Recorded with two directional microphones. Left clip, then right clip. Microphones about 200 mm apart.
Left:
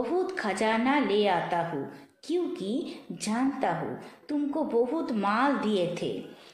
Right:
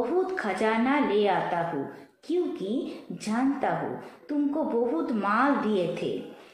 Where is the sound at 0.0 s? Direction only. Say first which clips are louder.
Right 2 dB; 40° left (ahead or behind).